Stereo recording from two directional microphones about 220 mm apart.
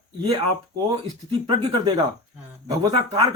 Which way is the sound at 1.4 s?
20° right (ahead or behind).